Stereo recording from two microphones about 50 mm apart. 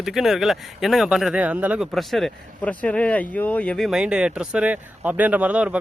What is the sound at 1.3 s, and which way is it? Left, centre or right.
Speech, right.